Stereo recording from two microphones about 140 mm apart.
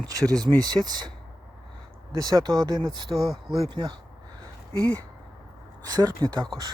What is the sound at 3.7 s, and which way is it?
Speech, 30° right (ahead or behind).